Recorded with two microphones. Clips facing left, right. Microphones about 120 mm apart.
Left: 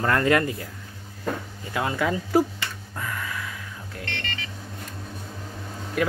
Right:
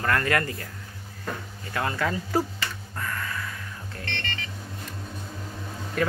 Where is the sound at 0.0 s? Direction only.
20° left (ahead or behind).